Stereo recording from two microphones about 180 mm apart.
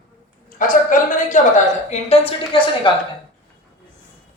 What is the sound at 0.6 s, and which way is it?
A woman's voice, 45° left (ahead or behind).